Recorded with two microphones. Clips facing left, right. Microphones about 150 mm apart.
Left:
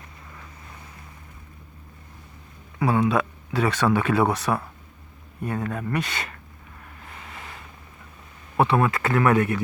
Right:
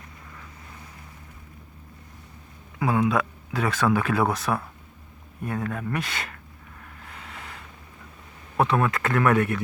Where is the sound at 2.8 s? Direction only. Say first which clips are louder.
Left 1 dB; centre (ahead or behind).